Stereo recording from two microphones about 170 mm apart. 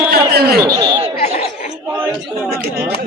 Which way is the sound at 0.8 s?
35° right (ahead or behind).